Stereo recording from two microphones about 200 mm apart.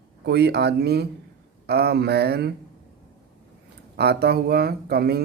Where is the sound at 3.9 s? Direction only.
55° right (ahead or behind).